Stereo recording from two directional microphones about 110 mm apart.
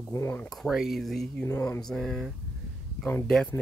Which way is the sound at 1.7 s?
5° left (ahead or behind).